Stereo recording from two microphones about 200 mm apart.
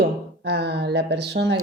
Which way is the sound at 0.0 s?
55° right (ahead or behind).